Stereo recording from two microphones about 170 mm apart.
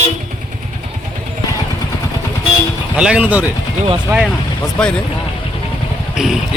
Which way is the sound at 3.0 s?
5° right (ahead or behind).